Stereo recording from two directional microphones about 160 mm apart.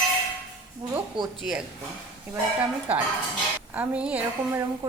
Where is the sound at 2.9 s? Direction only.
10° right (ahead or behind).